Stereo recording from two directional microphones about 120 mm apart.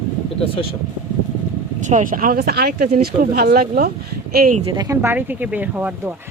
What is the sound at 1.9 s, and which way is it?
Speech, 90° right.